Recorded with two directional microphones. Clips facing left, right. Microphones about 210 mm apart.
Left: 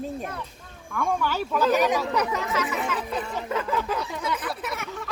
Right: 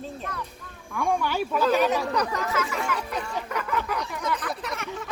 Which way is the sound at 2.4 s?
20° left (ahead or behind).